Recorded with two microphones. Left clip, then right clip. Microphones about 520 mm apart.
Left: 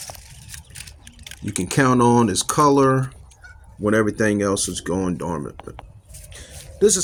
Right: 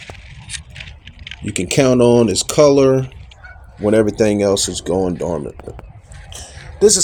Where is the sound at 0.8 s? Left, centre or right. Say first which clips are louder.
Right 6 dB; left.